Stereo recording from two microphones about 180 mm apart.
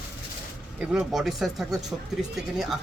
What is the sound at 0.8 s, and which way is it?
Speech, 5° right (ahead or behind).